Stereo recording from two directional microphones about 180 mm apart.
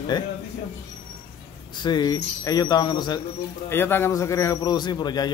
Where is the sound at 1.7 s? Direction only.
25° left (ahead or behind).